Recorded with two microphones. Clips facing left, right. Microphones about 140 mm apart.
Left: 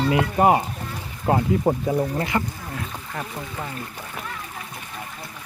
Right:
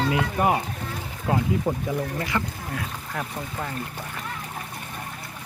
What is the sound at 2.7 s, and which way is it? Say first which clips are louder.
Speech: right 1 dB; centre (ahead or behind).